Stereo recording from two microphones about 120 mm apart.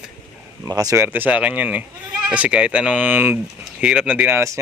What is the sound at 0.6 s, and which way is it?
Speech, 30° right (ahead or behind).